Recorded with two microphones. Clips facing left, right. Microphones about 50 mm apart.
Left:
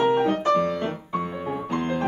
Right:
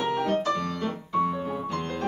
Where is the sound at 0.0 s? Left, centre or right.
Left.